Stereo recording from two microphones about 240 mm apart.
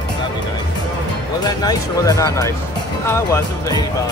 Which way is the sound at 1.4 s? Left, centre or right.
Centre.